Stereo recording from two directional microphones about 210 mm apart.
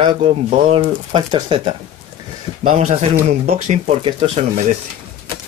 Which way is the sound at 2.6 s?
35° right (ahead or behind).